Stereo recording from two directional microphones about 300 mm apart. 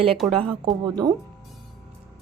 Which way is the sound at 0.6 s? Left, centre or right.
Centre.